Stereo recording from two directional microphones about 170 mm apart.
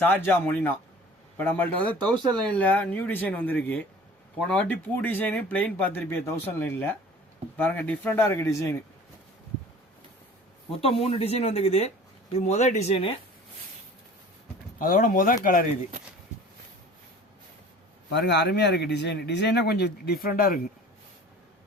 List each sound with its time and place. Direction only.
0.0 s speech: 10° left (ahead or behind)
10.7 s speech: 35° left (ahead or behind)
14.8 s speech: 55° left (ahead or behind)
18.1 s speech: 80° left; by 20.6 s 55° left (ahead or behind)